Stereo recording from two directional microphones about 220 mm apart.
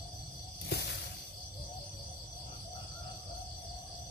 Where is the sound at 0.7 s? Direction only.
50° left (ahead or behind).